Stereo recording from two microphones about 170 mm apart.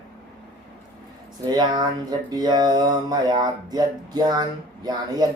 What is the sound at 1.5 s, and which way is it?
A man's voice, 25° right (ahead or behind).